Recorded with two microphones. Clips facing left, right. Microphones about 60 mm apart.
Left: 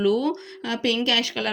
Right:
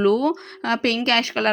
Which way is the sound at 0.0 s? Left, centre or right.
Right.